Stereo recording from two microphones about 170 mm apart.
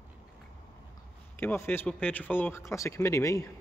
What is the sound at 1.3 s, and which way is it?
Speech, 10° left (ahead or behind).